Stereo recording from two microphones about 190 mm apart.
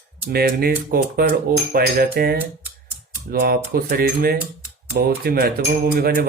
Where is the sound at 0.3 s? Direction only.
50° right (ahead or behind).